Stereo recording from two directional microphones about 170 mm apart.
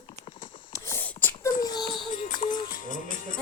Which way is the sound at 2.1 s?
50° left (ahead or behind).